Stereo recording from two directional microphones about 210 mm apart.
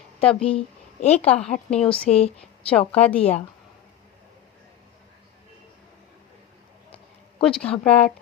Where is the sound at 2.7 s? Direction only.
5° left (ahead or behind).